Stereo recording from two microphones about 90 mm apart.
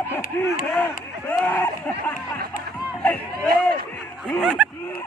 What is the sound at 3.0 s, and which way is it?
Chop, 20° left (ahead or behind).